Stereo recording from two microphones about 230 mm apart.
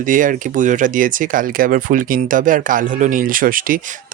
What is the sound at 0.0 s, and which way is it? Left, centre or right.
Speech, right.